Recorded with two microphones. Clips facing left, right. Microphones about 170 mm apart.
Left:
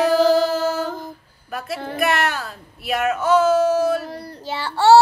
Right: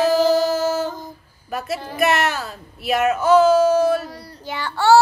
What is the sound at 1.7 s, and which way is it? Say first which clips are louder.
Speech: left 1 dB; 60° left (ahead or behind).